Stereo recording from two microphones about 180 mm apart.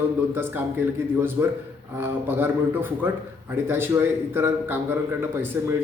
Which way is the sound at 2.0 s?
10° right (ahead or behind).